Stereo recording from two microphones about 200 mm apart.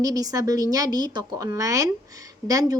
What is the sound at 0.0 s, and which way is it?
Speech, 15° right (ahead or behind).